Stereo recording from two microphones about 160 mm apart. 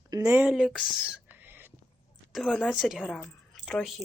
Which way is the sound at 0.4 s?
5° right (ahead or behind).